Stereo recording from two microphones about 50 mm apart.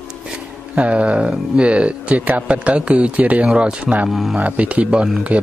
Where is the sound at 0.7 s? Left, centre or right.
Right.